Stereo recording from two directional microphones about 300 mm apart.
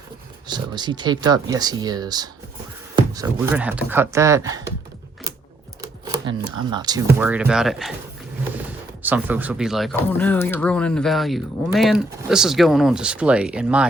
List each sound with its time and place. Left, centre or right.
0.4 s speech: centre
5.8 s speech: centre
9.0 s speech: centre